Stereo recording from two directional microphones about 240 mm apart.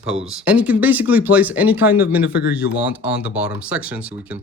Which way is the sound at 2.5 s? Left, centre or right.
Centre.